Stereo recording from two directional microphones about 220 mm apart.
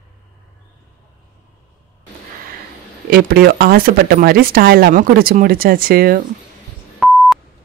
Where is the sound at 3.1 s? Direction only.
45° right (ahead or behind).